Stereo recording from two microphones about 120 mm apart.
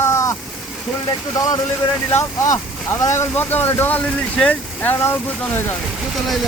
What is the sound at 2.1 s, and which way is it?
Speech, 25° left (ahead or behind).